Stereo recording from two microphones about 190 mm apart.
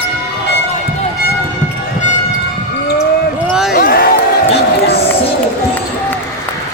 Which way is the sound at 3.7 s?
50° left (ahead or behind).